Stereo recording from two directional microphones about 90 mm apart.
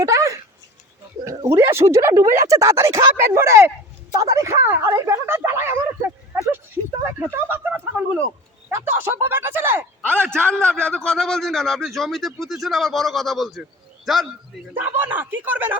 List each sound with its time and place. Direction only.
0.0 s speech: 35° right (ahead or behind)
1.5 s speech: 30° right (ahead or behind)
7.2 s a sound: 25° right (ahead or behind)
10.2 s a man's voice: 10° left (ahead or behind)
14.8 s speech: 20° right (ahead or behind)